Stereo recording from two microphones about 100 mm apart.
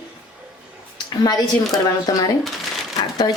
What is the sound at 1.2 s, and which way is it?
Speech, 45° left (ahead or behind).